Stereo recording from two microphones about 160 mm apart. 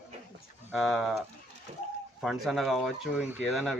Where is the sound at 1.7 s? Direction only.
40° right (ahead or behind).